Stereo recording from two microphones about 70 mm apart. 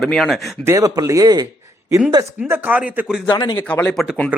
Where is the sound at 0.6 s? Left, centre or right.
Right.